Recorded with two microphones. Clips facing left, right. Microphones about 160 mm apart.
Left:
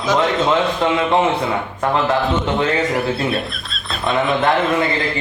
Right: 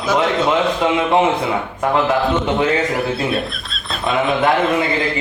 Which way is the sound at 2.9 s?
Centre (ahead or behind).